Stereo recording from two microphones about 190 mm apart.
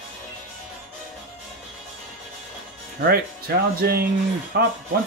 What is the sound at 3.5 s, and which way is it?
Speech, 55° right (ahead or behind).